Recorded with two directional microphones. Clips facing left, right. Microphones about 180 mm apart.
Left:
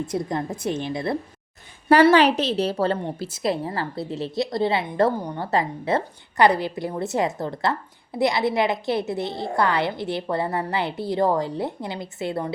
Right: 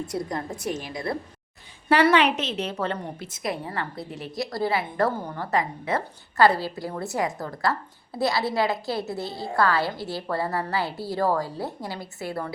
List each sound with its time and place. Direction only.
0.1 s a woman's voice: 25° left (ahead or behind)
6.3 s a woman's voice: 20° left (ahead or behind)